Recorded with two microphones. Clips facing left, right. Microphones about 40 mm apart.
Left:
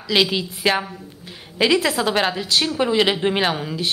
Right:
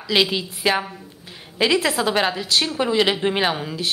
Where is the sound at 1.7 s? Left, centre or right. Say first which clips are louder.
Left 1 dB; centre.